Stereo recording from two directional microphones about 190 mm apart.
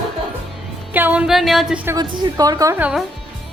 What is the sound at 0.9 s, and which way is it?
A woman's voice, 10° right (ahead or behind).